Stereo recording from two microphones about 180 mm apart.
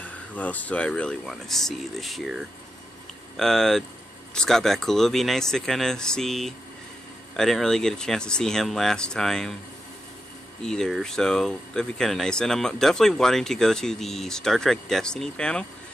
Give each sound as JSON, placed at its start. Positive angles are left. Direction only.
{"t": 0.0, "sound": "speech", "side_deg": 10}
{"t": 10.6, "sound": "speech", "side_deg": 5}